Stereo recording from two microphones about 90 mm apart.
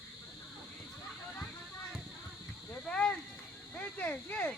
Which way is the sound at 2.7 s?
10° left (ahead or behind).